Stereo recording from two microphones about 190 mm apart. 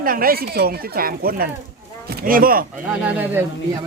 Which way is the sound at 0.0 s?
50° right (ahead or behind).